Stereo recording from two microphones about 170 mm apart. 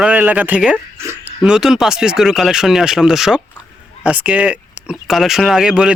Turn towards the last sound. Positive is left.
turn(degrees=-5)  # may be behind; listen again after turning